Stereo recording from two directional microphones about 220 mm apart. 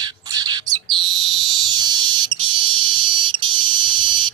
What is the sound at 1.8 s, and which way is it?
Fire alarm, 20° right (ahead or behind).